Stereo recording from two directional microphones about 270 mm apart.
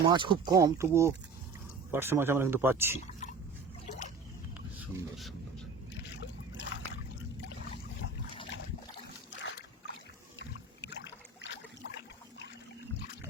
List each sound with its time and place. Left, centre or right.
0.1 s speech: centre
3.1 s drip: left
6.0 s boat: left
9.4 s boat: left
10.3 s rowboat: left